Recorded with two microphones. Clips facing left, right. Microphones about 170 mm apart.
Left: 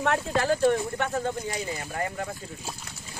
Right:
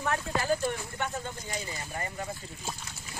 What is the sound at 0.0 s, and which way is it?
Speech, 85° left.